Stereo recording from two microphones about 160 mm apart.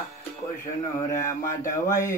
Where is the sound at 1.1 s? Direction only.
20° left (ahead or behind).